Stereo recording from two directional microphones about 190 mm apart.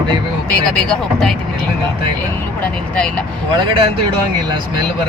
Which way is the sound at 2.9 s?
5° left (ahead or behind).